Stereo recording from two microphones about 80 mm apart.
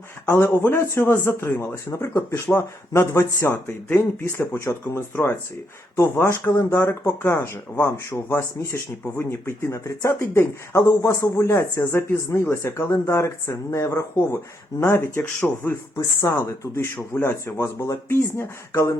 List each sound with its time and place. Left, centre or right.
0.3 s speech: left
16.0 s speech: left